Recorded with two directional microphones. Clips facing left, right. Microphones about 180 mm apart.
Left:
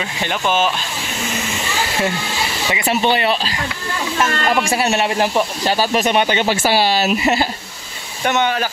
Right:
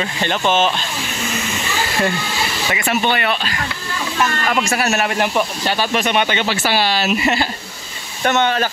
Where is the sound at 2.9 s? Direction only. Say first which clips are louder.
Left 3 dB; 30° left (ahead or behind).